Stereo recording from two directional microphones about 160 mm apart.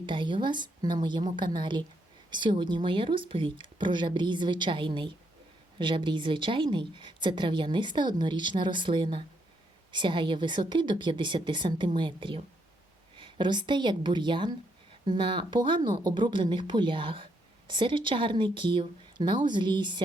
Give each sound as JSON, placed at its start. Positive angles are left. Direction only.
{"t": 0.0, "sound": "a woman's voice", "side_deg": -30}